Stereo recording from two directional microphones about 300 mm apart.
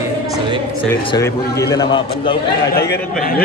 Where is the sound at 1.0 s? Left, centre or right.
Centre.